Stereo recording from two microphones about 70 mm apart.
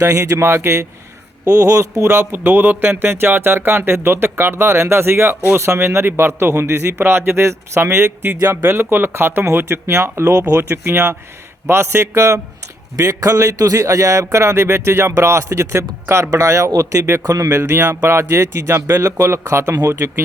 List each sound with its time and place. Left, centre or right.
0.0 s speech: right
10.5 s speech: right
13.0 s speech: right
16.0 s speech: right